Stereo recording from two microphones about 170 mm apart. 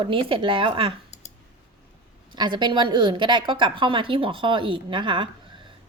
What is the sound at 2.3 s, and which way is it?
A woman's voice, 25° right (ahead or behind).